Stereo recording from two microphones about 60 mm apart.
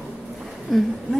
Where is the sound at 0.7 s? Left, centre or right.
Centre.